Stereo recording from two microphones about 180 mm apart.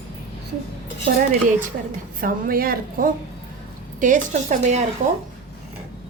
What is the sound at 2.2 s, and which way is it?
A woman's voice, 55° right (ahead or behind).